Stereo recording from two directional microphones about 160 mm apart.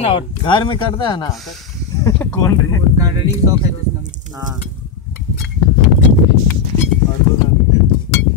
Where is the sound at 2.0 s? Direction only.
15° left (ahead or behind).